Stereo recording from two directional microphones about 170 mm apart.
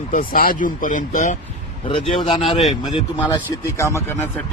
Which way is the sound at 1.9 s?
30° left (ahead or behind).